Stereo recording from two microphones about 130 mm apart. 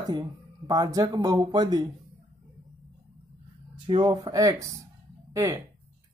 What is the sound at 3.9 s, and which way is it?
Speech, 35° right (ahead or behind).